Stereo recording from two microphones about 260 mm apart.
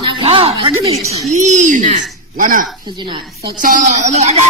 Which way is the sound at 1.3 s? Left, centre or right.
Right.